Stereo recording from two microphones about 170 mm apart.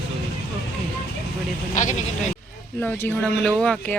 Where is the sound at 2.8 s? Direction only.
5° left (ahead or behind).